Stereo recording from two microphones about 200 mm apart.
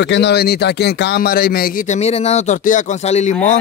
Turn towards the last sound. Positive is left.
turn(degrees=35)  # may be behind; listen again after turning